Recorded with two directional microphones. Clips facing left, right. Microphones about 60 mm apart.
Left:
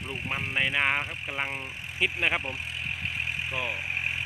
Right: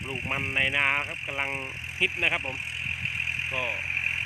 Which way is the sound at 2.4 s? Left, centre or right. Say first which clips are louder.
Right 1 dB; centre.